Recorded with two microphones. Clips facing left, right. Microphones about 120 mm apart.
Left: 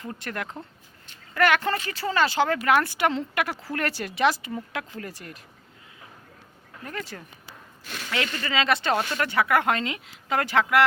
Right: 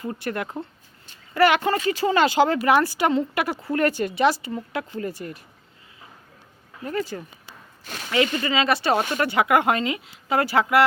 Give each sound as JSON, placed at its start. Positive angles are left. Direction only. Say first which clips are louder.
{"t": 0.0, "sound": "speech", "louder": "right 5 dB", "side_deg": -10}
{"t": 2.6, "sound": "speech", "louder": "right 3 dB", "side_deg": -5}
{"t": 7.1, "sound": "speech", "louder": "right 7 dB", "side_deg": -15}
{"t": 8.1, "sound": "speech", "louder": "right 6 dB", "side_deg": -5}